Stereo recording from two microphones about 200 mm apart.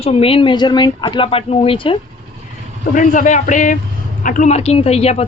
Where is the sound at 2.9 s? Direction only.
40° left (ahead or behind).